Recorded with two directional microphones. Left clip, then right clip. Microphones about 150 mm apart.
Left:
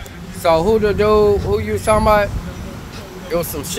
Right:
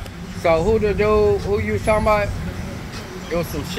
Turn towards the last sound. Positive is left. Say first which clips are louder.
# left 3 dB
turn(degrees=40)  # may be behind; listen again after turning